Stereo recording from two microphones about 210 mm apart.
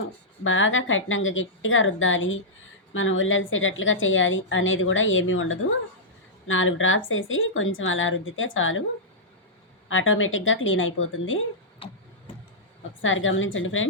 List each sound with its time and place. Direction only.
0.4 s a woman's voice: 70° left (ahead or behind)
9.9 s a woman's voice: 70° left (ahead or behind)
13.0 s a woman's voice: 70° left (ahead or behind)